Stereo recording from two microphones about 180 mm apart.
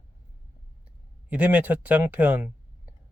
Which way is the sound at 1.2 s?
10° right (ahead or behind).